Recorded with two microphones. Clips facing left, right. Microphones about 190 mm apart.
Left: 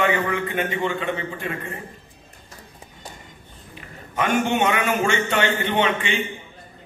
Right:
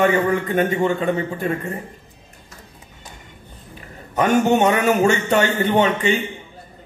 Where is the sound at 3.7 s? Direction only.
40° right (ahead or behind).